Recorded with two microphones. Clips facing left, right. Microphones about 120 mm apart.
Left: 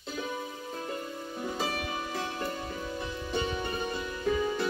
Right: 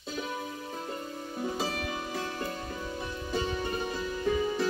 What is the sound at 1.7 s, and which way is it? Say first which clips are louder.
Music: even; 15° left (ahead or behind).